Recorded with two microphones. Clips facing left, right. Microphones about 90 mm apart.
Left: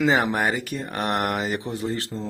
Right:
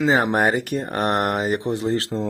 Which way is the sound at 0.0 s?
30° right (ahead or behind).